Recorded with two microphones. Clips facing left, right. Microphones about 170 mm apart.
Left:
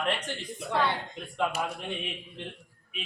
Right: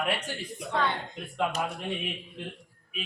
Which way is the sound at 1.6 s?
Centre (ahead or behind).